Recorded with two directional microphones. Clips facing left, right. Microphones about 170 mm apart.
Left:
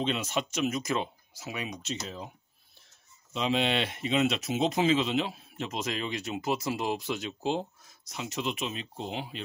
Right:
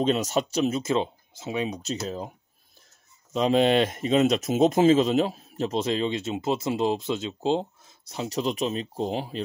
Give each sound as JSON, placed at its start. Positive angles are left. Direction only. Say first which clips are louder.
{"t": 0.0, "sound": "speech", "louder": "right 7 dB", "side_deg": -40}
{"t": 3.3, "sound": "speech", "louder": "right 8 dB", "side_deg": -45}